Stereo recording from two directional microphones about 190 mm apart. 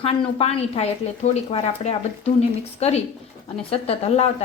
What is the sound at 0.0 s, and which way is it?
Speech, 30° left (ahead or behind).